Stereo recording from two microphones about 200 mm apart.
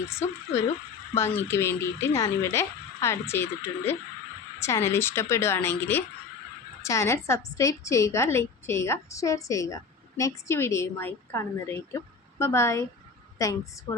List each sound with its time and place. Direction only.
1.1 s a woman's voice: 10° left (ahead or behind)